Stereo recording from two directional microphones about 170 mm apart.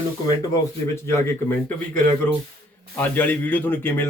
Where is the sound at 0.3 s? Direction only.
20° left (ahead or behind).